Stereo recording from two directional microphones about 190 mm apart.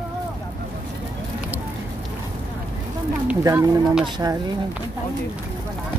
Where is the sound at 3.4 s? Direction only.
20° right (ahead or behind).